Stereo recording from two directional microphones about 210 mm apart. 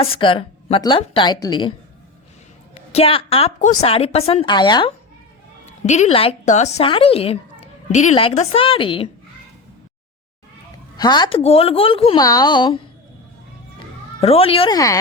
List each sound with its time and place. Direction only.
0.0 s a woman's voice: 25° left (ahead or behind)
2.9 s a woman's voice: 25° left (ahead or behind)
5.6 s a woman's voice: 35° left (ahead or behind)
10.9 s a woman's voice: 20° left (ahead or behind)
14.2 s a woman's voice: 30° left (ahead or behind)